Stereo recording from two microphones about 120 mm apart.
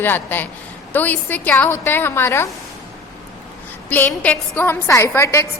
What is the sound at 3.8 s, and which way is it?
A woman's voice, 15° left (ahead or behind).